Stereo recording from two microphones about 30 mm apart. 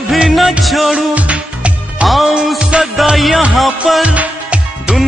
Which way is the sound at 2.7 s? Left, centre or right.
Right.